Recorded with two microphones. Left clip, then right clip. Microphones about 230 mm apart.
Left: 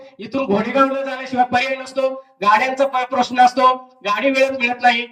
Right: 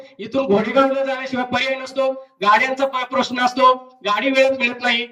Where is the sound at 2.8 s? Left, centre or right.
Centre.